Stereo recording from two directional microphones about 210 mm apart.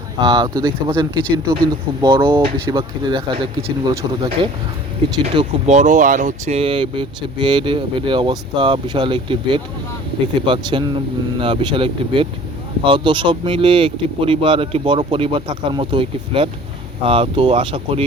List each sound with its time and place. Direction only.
0.2 s speech: 20° right (ahead or behind)
5.2 s speech: 30° right (ahead or behind)